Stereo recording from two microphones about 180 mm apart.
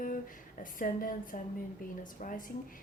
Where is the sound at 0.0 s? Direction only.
45° left (ahead or behind).